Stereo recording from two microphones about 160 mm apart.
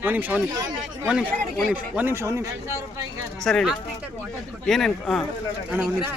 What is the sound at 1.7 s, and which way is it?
Speech, 10° right (ahead or behind).